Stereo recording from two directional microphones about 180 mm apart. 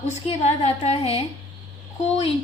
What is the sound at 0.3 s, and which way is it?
A woman's voice, 35° left (ahead or behind).